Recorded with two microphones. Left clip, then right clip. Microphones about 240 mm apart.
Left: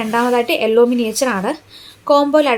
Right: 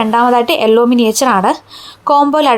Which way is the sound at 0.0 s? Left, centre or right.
Right.